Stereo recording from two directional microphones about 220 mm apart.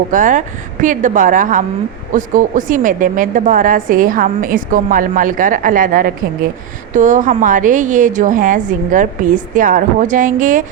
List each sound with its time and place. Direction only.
0.1 s a woman's voice: 35° right (ahead or behind)